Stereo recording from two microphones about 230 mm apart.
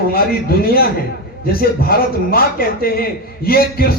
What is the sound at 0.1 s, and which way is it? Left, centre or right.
A man's voice, left.